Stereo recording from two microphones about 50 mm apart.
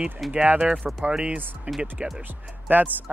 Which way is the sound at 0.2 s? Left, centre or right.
Centre.